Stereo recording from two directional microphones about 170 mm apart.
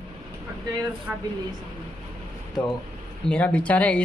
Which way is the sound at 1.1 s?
10° right (ahead or behind).